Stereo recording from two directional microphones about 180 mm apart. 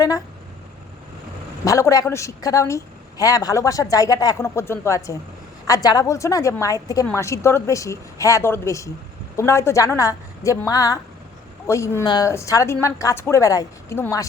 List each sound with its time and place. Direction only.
1.6 s a woman's voice: 20° left (ahead or behind)